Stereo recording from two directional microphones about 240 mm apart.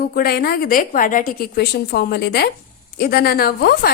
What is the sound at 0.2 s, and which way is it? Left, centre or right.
A woman's voice, left.